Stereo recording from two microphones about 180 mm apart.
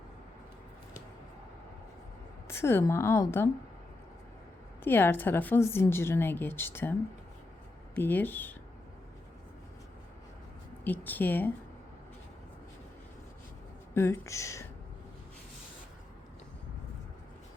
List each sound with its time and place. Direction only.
2.5 s a woman's voice: 15° left (ahead or behind)
4.8 s a woman's voice: 10° left (ahead or behind)
7.9 s a woman's voice: 10° left (ahead or behind)
10.8 s a woman's voice: 10° left (ahead or behind)
13.9 s a woman's voice: 15° left (ahead or behind)